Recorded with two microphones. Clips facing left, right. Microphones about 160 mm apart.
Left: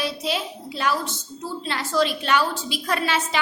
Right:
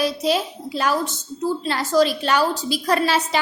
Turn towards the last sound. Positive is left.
turn(degrees=-40)  # may be behind; listen again after turning